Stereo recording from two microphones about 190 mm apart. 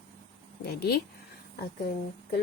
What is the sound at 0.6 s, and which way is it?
Speech, 55° left (ahead or behind).